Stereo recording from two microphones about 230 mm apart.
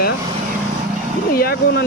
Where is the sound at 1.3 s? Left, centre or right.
Left.